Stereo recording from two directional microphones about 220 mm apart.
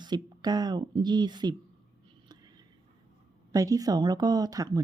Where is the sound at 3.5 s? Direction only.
15° right (ahead or behind).